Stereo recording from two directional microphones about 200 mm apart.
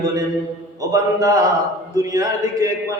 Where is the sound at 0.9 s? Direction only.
15° right (ahead or behind).